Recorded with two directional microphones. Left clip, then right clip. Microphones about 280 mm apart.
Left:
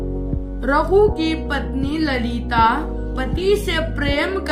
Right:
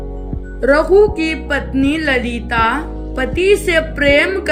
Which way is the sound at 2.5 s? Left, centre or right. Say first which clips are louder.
Right 1 dB; centre.